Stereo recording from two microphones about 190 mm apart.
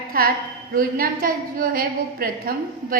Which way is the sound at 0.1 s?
50° right (ahead or behind).